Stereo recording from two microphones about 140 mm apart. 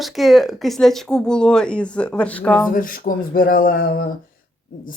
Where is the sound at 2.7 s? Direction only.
80° left.